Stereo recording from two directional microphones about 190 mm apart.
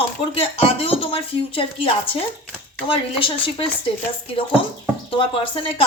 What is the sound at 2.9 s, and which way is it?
Speech, 25° left (ahead or behind).